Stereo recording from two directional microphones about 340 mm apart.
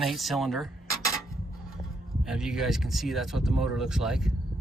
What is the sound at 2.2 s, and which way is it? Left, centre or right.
Speech, centre.